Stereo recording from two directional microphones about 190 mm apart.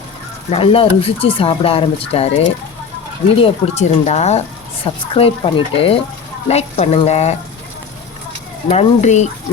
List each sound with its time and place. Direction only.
0.5 s speech: 30° left (ahead or behind)
8.7 s speech: 35° left (ahead or behind)